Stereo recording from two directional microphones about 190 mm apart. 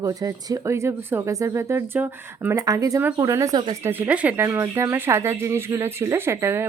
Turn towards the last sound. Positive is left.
turn(degrees=-15)  # may be behind; listen again after turning